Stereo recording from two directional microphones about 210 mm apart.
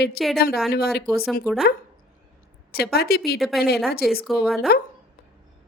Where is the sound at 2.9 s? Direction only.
50° left (ahead or behind).